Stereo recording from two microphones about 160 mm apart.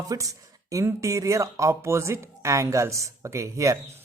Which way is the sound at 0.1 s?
20° right (ahead or behind).